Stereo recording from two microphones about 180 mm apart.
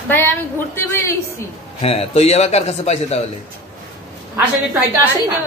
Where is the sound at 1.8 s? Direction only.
35° left (ahead or behind).